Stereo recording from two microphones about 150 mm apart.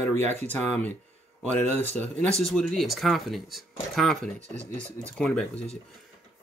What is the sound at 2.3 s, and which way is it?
Speech, centre (ahead or behind).